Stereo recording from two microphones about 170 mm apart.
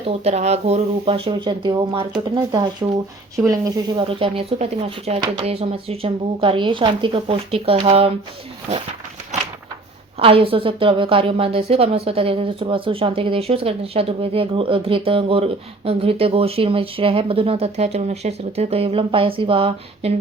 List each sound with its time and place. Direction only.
0.3 s a woman's voice: 40° right (ahead or behind); by 4.0 s 20° right (ahead or behind)
4.1 s a woman's voice: 35° right (ahead or behind)
10.2 s a woman's voice: 35° right (ahead or behind)